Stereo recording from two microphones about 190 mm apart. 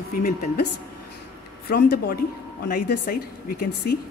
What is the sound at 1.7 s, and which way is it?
Speech, 55° left (ahead or behind).